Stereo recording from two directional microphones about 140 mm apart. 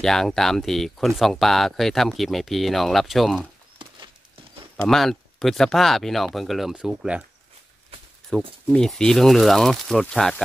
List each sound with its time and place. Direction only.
0.0 s speech: 5° left (ahead or behind)
3.8 s a sound: 35° right (ahead or behind)
4.8 s speech: centre (ahead or behind)
8.3 s speech: 5° left (ahead or behind)